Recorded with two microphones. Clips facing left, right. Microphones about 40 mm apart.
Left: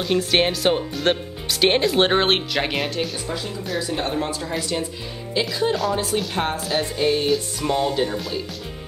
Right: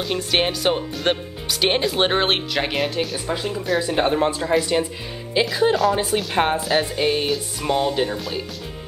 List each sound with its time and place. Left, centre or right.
0.0 s speech: centre
3.3 s speech: right
6.3 s speech: right
6.6 s speech: centre